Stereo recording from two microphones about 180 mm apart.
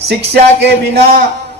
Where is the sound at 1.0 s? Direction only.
45° right (ahead or behind).